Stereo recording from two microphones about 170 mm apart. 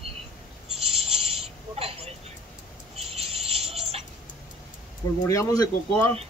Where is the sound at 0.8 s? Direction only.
35° right (ahead or behind).